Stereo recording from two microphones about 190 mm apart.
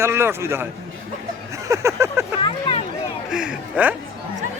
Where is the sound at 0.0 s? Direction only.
15° right (ahead or behind).